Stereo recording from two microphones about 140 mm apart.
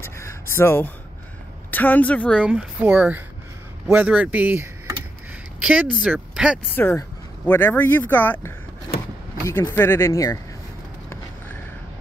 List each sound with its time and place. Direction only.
0.0 s a sound: 20° left (ahead or behind)
1.7 s speech: 10° left (ahead or behind)
2.4 s a woman's voice: 5° right (ahead or behind)
6.7 s speech: 15° left (ahead or behind)